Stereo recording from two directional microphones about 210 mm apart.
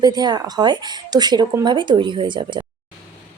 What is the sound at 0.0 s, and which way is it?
Speech, 20° right (ahead or behind).